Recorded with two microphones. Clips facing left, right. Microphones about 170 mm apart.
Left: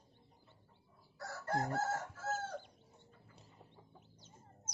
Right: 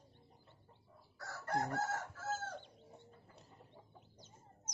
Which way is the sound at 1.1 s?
30° left (ahead or behind).